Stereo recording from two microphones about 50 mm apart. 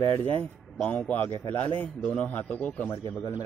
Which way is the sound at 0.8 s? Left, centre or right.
Left.